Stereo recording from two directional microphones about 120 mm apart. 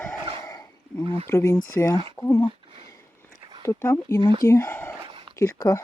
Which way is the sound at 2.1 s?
25° left (ahead or behind).